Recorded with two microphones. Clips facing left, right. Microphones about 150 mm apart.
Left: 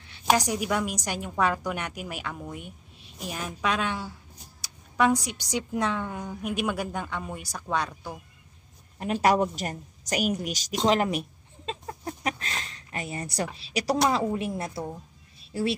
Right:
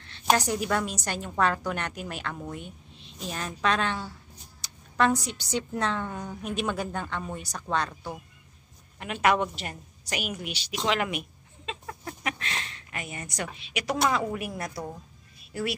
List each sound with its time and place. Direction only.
0.0 s a woman's voice: 10° left (ahead or behind)
8.9 s a woman's voice: 35° left (ahead or behind)